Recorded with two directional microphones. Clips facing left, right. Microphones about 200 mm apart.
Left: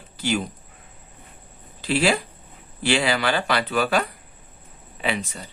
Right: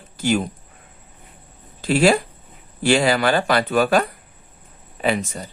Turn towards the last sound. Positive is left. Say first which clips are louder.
# right 5 dB
turn(degrees=-45)  # may be behind; listen again after turning